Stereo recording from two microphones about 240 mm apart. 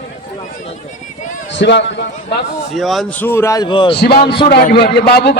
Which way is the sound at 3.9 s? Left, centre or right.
Left.